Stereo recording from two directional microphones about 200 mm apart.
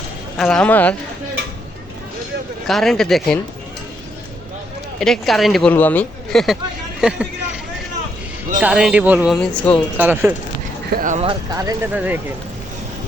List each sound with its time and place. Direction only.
0.3 s speech: 5° left (ahead or behind)
2.6 s speech: centre (ahead or behind)
4.9 s speech: centre (ahead or behind)
8.6 s speech: 5° right (ahead or behind)
10.0 s speech: 10° right (ahead or behind)
10.9 s speech: 40° right (ahead or behind)
11.3 s speech: 20° right (ahead or behind)